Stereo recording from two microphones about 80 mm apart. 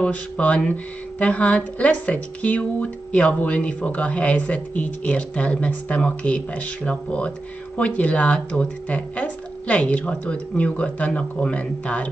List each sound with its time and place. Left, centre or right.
0.0 s speech: centre